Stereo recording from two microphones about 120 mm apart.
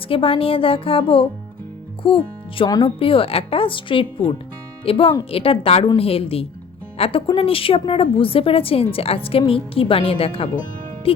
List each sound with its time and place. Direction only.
0.1 s a woman's voice: 50° left (ahead or behind)